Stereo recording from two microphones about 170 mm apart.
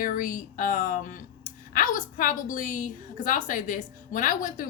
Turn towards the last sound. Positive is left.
turn(degrees=50)  # may be behind; listen again after turning